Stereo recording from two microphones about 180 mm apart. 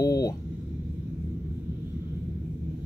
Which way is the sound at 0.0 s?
20° left (ahead or behind).